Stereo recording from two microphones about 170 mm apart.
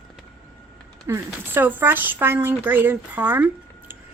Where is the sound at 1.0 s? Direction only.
15° right (ahead or behind).